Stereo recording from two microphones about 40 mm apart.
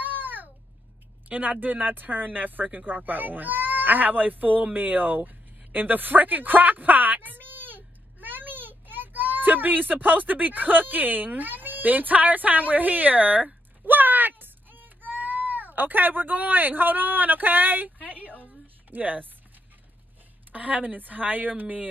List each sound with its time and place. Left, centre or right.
0.0 s babbling: right
1.3 s speech: right
13.8 s a sound: right
18.9 s speech: right
20.5 s a woman's voice: right